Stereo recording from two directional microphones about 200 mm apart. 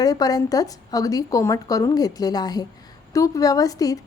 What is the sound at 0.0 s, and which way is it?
A woman's voice, 20° left (ahead or behind).